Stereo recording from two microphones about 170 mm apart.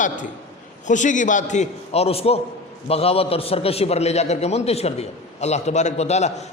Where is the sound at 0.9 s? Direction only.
45° left (ahead or behind).